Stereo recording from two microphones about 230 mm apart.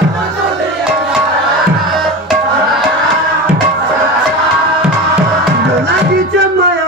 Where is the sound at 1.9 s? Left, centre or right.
Centre.